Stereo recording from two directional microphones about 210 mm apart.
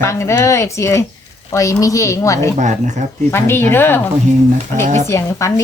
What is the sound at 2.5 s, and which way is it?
Speech, 35° right (ahead or behind).